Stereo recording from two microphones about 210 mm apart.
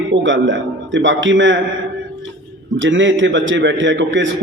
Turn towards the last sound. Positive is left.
turn(degrees=-65)  # may be behind; listen again after turning